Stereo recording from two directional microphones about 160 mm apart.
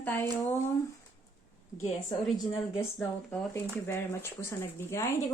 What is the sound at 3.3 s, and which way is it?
Speech, 15° left (ahead or behind).